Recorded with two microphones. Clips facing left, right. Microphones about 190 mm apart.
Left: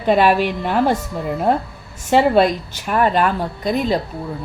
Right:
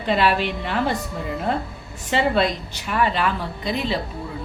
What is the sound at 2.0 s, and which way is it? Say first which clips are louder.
A woman's voice: left 6 dB; 50° left (ahead or behind).